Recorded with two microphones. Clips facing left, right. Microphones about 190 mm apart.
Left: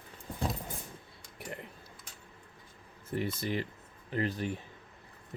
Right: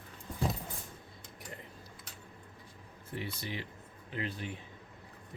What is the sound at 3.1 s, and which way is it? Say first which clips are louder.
Speech: left 7 dB; 45° left (ahead or behind).